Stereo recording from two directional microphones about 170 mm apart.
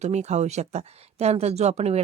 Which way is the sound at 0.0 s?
40° right (ahead or behind).